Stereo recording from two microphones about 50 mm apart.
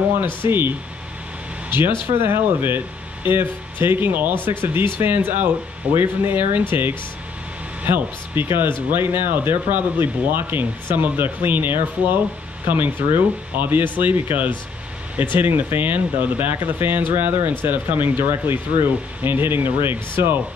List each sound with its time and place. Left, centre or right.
0.5 s speech: right